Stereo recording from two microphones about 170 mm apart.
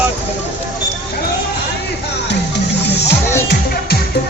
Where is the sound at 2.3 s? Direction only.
85° left.